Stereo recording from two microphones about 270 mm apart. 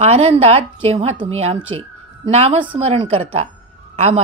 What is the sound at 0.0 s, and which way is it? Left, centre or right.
A woman's voice, right.